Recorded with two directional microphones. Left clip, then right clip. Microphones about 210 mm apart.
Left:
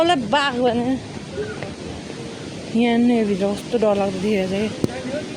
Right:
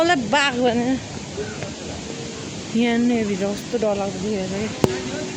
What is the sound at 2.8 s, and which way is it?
Speech, 15° left (ahead or behind).